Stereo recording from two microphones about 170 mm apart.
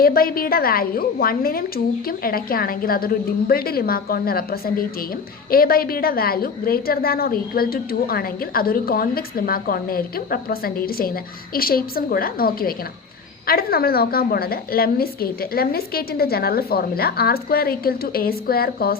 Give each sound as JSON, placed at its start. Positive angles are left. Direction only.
{"t": 0.0, "sound": "a woman's voice", "side_deg": 60}